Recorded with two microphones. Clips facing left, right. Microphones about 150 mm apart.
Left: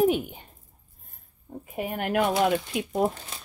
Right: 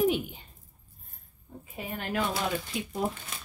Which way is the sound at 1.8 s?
60° left (ahead or behind).